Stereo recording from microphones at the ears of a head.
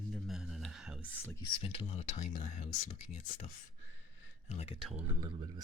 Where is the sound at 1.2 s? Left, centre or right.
Left.